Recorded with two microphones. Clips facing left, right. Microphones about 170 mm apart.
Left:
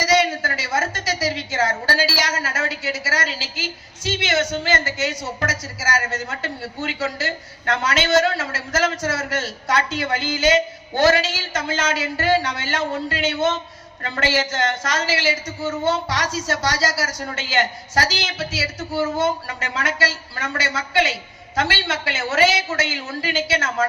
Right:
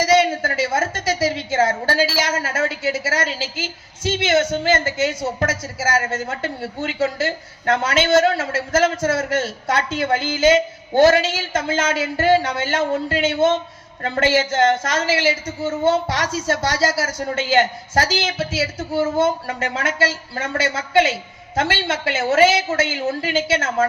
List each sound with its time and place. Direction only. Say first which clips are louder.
0.0 s a sound: right 3 dB; 50° right (ahead or behind)
2.0 s a man's voice: right 3 dB; 50° right (ahead or behind)
21.5 s a man's voice: right 2 dB; 50° right (ahead or behind)